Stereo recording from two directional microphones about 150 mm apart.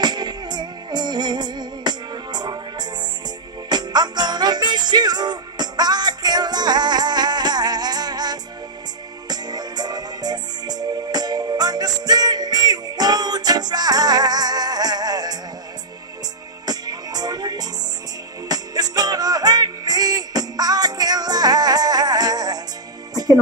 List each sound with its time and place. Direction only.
0.0 s music: 30° right (ahead or behind)
16.6 s music: 25° right (ahead or behind)